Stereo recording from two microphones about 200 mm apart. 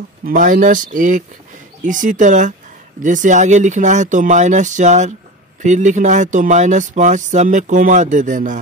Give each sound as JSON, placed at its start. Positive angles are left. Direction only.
{"t": 0.2, "sound": "speech", "side_deg": -40}